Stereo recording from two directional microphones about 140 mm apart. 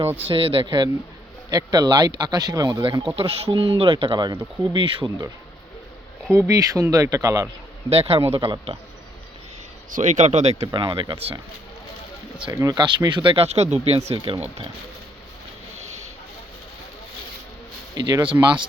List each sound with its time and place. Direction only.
0.3 s speech: 40° right (ahead or behind)
3.2 s speech: 45° right (ahead or behind)
5.0 s speech: 25° right (ahead or behind)
6.3 s speech: 25° right (ahead or behind)
7.9 s a man's voice: 45° right (ahead or behind)
9.9 s speech: 60° right (ahead or behind)
10.7 s speech: 35° right (ahead or behind)
12.5 s speech: 25° right (ahead or behind); by 14.3 s 45° right (ahead or behind)
15.8 s vehicle: 55° right (ahead or behind)
17.9 s speech: 35° right (ahead or behind)